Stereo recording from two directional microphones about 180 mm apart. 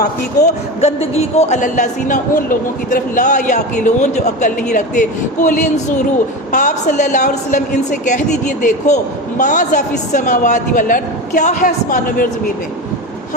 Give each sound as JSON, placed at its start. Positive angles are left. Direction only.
{"t": 0.8, "sound": "speech", "side_deg": 35}